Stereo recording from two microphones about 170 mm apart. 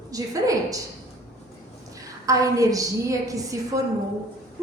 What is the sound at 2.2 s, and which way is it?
A woman's voice, 20° right (ahead or behind).